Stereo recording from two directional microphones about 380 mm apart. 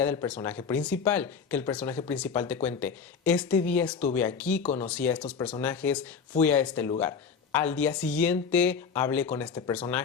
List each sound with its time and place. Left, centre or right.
0.0 s speech: centre
4.6 s speech: centre
4.9 s speech: centre